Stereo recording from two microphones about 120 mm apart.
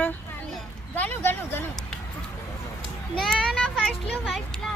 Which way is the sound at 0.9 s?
15° left (ahead or behind).